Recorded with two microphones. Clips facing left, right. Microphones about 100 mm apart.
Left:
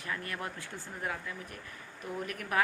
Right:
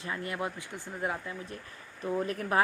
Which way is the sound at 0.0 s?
25° right (ahead or behind).